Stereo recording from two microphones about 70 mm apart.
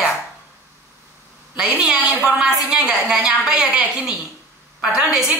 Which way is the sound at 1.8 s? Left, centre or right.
Centre.